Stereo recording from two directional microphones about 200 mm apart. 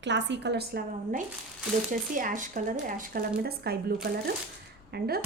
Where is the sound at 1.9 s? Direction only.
40° right (ahead or behind).